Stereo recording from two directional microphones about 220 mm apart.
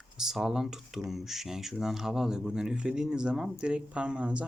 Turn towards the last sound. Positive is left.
turn(degrees=-5)  # may be behind; listen again after turning